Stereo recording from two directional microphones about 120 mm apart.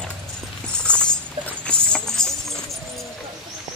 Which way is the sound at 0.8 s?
10° left (ahead or behind).